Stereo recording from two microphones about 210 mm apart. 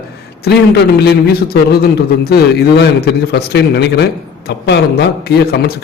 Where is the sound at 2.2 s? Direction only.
50° left (ahead or behind).